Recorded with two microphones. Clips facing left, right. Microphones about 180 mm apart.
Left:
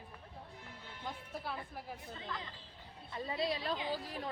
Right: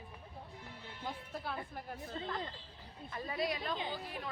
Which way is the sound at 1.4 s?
Centre (ahead or behind).